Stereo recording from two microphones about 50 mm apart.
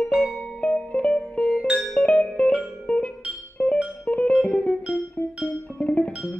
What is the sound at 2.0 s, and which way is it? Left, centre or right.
Music, left.